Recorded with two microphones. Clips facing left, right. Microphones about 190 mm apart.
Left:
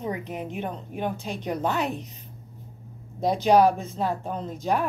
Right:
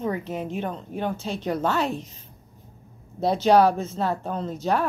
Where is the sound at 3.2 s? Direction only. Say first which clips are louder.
Right 1 dB; 15° left (ahead or behind).